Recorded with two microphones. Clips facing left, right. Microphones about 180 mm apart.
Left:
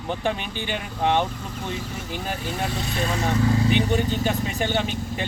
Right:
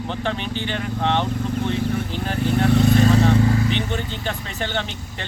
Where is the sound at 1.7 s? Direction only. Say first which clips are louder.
Right 7 dB; 60° right (ahead or behind).